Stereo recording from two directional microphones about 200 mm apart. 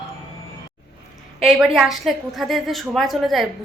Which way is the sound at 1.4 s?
5° right (ahead or behind).